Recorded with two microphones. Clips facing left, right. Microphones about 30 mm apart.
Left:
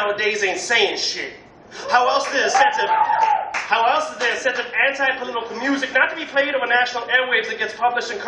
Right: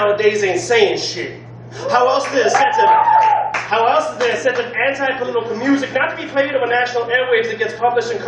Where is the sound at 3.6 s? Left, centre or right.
Centre.